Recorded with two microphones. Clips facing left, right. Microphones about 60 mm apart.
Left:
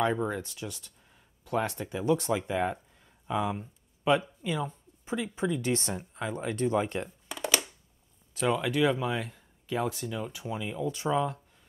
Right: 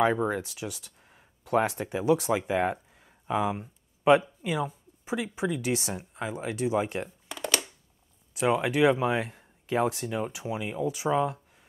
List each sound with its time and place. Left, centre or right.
0.0 s speech: centre
7.2 s a sound: centre
8.4 s speech: right
10.3 s speech: centre